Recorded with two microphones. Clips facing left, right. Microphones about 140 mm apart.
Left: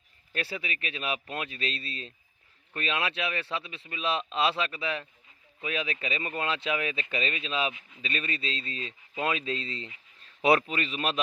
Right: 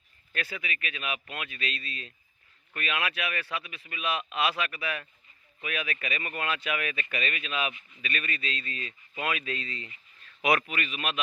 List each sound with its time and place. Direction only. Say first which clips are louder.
0.3 s speech: left 2 dB; 30° left (ahead or behind)